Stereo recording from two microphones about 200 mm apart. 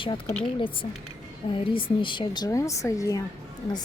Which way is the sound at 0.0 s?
20° left (ahead or behind).